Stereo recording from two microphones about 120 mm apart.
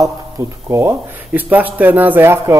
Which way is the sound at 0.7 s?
20° right (ahead or behind).